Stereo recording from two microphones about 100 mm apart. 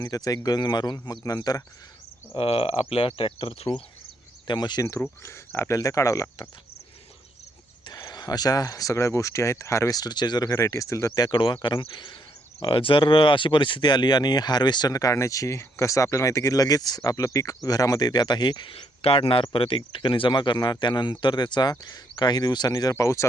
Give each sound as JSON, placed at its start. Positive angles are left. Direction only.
{"t": 0.0, "sound": "speech", "side_deg": 35}
{"t": 2.3, "sound": "speech", "side_deg": 70}
{"t": 4.4, "sound": "speech", "side_deg": 45}
{"t": 5.2, "sound": "speech", "side_deg": 25}
{"t": 7.9, "sound": "speech", "side_deg": 45}
{"t": 10.5, "sound": "speech", "side_deg": 30}
{"t": 18.7, "sound": "speech", "side_deg": 75}